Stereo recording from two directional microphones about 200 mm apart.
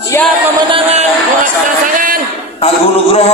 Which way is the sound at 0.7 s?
30° right (ahead or behind).